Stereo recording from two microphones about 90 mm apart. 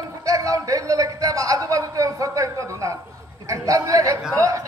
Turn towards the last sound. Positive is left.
turn(degrees=-35)  # may be behind; listen again after turning